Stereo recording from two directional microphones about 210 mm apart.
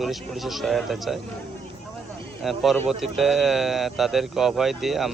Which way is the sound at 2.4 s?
Centre (ahead or behind).